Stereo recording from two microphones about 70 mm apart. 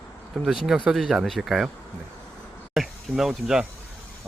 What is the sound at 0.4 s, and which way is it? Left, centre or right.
Speech, centre.